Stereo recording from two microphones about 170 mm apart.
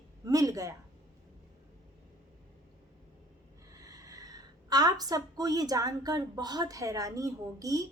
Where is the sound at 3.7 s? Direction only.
20° right (ahead or behind).